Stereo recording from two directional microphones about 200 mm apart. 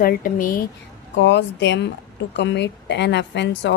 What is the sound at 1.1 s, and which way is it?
A woman's voice, 60° left (ahead or behind).